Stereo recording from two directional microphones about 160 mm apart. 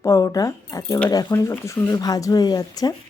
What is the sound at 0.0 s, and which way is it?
A woman's voice, 20° left (ahead or behind).